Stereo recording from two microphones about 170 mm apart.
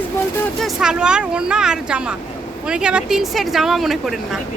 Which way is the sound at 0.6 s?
5° right (ahead or behind).